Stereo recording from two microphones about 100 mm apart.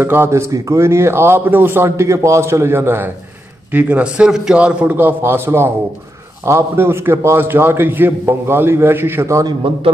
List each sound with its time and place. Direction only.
0.0 s a man's voice: 25° right (ahead or behind)
3.7 s a man's voice: 10° right (ahead or behind); by 9.5 s 30° right (ahead or behind)